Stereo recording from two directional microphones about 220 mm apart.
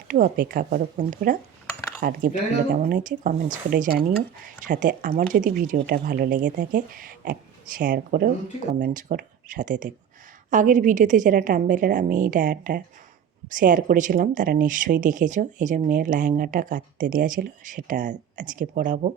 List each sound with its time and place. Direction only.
0.1 s speech: 40° right (ahead or behind)